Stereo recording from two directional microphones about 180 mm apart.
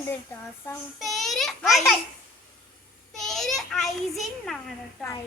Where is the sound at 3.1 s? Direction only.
Centre (ahead or behind).